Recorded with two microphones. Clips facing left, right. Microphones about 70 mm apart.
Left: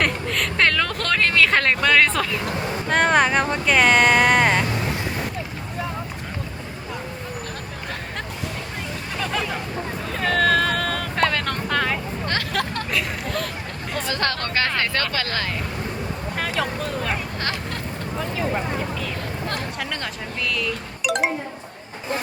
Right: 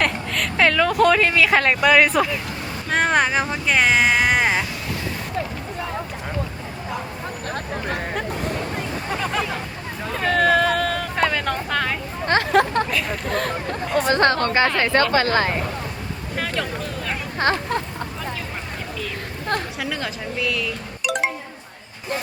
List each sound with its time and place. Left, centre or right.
0.0 s a sound: centre
2.9 s speech: centre
9.1 s speech: centre
10.2 s vehicle: centre
12.3 s speech: right
14.1 s speech: right
16.4 s vehicle: centre
19.8 s speech: centre